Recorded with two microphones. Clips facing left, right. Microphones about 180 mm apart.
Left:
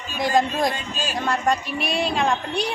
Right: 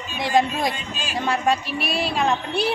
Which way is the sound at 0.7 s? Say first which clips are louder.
Left 3 dB; 40° left (ahead or behind).